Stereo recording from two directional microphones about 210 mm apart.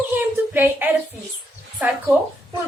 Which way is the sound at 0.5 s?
10° right (ahead or behind).